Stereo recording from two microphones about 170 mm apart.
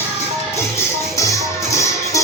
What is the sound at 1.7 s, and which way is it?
Music, 20° left (ahead or behind).